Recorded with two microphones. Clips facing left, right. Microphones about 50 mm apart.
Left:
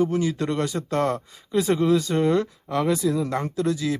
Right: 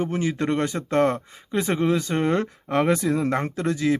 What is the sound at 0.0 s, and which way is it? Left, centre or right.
Speech, right.